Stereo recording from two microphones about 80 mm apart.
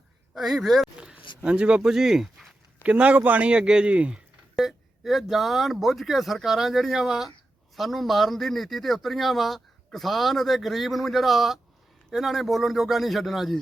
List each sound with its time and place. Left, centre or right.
0.3 s speech: centre
0.9 s a sound: centre
1.4 s a man's voice: centre
2.8 s a man's voice: centre
4.5 s speech: centre